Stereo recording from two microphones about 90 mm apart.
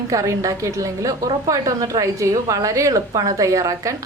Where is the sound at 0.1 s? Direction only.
40° right (ahead or behind).